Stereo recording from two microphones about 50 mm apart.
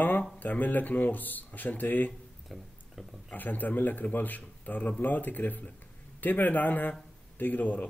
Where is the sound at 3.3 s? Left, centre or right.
Left.